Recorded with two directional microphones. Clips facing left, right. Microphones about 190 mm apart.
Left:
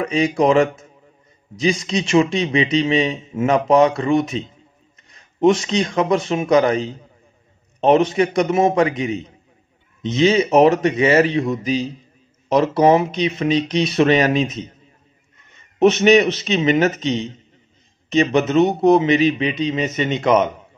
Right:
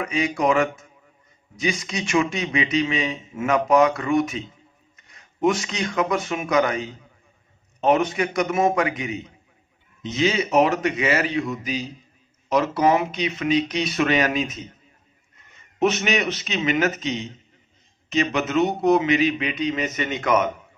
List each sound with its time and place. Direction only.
0.0 s speech: 30° left (ahead or behind)
15.8 s speech: 30° left (ahead or behind)
18.2 s speech: 30° left (ahead or behind)